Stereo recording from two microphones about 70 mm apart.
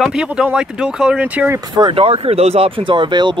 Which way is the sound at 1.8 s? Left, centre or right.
Right.